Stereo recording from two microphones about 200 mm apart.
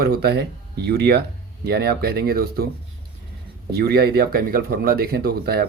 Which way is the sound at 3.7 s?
50° right (ahead or behind).